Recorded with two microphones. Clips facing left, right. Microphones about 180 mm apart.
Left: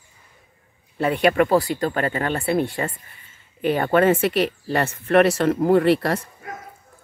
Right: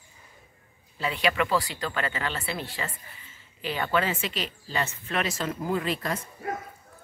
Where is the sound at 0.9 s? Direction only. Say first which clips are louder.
Left 9 dB; 55° left (ahead or behind); by 6.2 s 70° left (ahead or behind).